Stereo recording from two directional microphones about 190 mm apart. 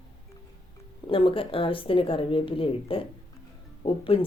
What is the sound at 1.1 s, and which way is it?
Speech, 30° left (ahead or behind).